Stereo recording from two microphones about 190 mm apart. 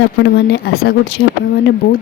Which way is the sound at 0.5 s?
55° left (ahead or behind).